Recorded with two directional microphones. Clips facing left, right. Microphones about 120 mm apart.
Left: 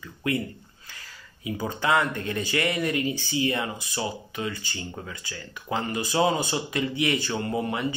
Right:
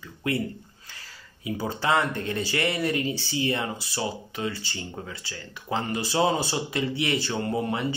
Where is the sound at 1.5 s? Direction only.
35° right (ahead or behind).